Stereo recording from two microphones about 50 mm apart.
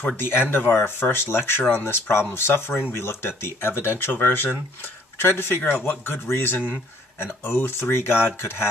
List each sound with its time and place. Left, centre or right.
0.0 s speech: left